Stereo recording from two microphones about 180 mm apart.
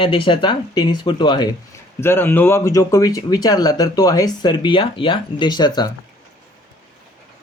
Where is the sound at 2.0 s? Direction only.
15° left (ahead or behind).